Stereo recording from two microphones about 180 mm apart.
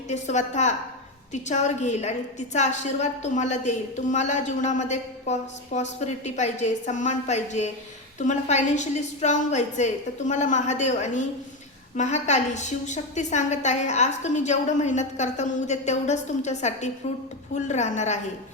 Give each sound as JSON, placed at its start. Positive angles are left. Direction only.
{"t": 0.1, "sound": "a woman's voice", "side_deg": 40}